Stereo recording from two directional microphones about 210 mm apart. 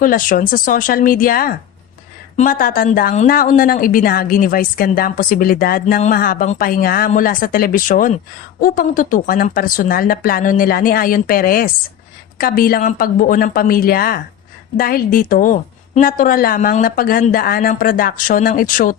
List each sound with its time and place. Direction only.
0.0 s speech: 40° left (ahead or behind)